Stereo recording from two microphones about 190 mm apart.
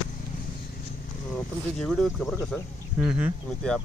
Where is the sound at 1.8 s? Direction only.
5° left (ahead or behind).